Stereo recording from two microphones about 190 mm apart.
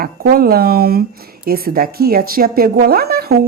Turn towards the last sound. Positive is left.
turn(degrees=-55)  # may be behind; listen again after turning